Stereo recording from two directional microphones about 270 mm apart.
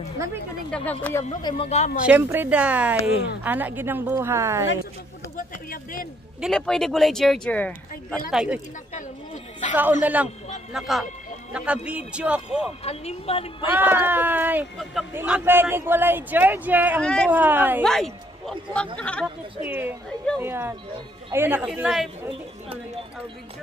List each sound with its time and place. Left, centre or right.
0.7 s speech: centre
1.6 s a woman's voice: left
2.0 s speech: centre
5.4 s speech: left
6.4 s speech: centre
8.9 s a sound: left
10.0 s speech: centre
12.8 s a woman's voice: left
13.7 s speech: centre
17.4 s speech: centre
19.6 s speech: centre